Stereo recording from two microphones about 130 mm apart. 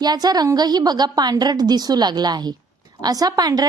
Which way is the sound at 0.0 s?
30° right (ahead or behind).